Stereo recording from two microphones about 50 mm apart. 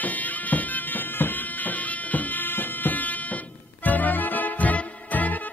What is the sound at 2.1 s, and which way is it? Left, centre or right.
Music, left.